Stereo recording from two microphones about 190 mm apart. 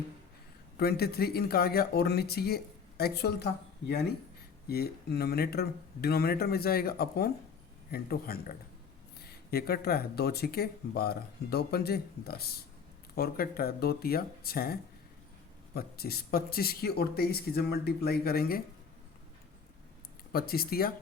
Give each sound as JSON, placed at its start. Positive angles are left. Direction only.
{"t": 0.8, "sound": "speech", "side_deg": 55}
{"t": 20.3, "sound": "speech", "side_deg": 50}